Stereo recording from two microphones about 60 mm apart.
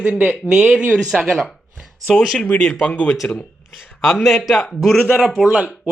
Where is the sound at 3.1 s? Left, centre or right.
Centre.